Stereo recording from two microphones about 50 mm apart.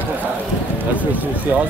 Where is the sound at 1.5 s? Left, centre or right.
Right.